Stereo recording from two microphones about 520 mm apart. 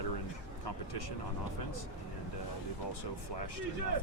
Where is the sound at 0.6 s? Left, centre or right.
Left.